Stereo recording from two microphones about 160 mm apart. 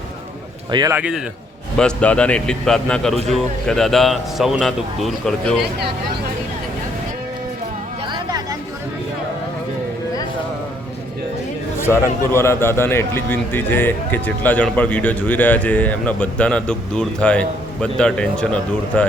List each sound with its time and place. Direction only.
0.7 s a man's voice: 25° right (ahead or behind)
0.9 s a man's voice: 5° right (ahead or behind)
1.8 s a man's voice: 5° left (ahead or behind)
8.0 s a sound: 25° right (ahead or behind)
11.8 s a man's voice: 15° left (ahead or behind)